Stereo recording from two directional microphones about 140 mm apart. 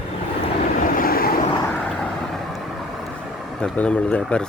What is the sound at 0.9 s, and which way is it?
Vehicle, 90° left.